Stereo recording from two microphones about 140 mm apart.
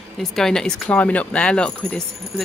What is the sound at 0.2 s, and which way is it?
Speech, 5° left (ahead or behind).